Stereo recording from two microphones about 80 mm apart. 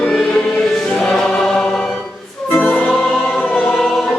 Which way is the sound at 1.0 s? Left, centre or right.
Centre.